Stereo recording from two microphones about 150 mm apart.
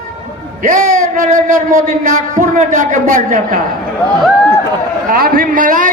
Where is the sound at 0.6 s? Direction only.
55° right (ahead or behind).